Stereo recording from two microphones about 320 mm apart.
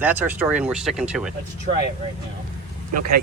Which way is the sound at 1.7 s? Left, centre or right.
Right.